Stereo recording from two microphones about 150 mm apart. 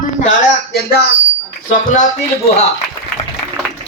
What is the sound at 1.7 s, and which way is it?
Speech, 55° left (ahead or behind).